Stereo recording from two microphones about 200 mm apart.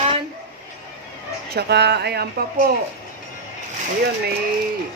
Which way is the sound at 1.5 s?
55° right (ahead or behind).